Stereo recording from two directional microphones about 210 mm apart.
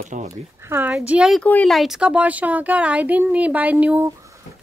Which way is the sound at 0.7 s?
10° right (ahead or behind).